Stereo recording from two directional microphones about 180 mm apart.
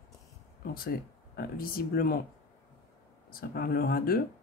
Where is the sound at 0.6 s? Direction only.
55° left (ahead or behind).